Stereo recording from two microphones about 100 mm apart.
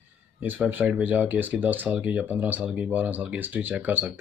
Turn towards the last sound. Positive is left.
turn(degrees=-15)  # may be behind; listen again after turning